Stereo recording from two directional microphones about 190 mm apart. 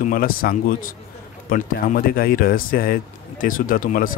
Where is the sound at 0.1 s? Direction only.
50° left (ahead or behind).